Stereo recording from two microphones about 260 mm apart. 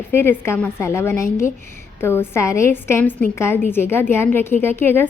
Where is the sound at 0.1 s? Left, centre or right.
Centre.